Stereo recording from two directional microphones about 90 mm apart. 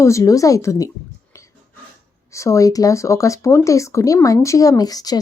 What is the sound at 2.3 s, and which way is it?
Speech, 35° left (ahead or behind).